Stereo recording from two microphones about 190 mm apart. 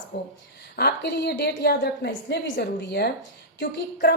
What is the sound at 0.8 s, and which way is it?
A woman's voice, 55° left (ahead or behind).